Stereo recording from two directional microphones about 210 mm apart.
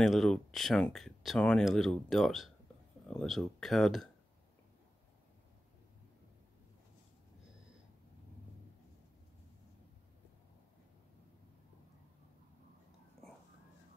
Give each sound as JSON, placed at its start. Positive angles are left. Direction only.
{"t": 0.0, "sound": "speech", "side_deg": 0}